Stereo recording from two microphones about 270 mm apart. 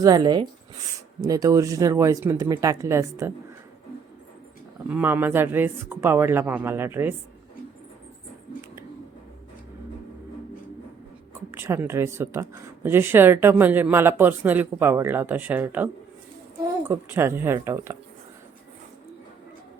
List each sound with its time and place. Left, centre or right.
0.0 s speech: centre
4.9 s speech: centre
11.5 s speech: centre